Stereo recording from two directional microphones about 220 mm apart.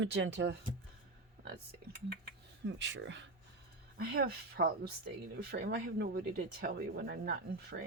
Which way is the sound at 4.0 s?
45° right (ahead or behind).